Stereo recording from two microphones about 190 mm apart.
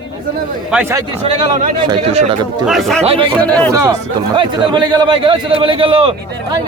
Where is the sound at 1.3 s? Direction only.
40° right (ahead or behind).